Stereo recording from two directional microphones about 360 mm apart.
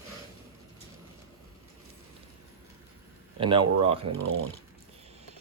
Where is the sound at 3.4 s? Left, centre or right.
Centre.